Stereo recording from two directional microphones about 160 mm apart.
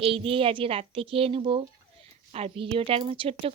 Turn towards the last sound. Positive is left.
turn(degrees=-35)  # may be behind; listen again after turning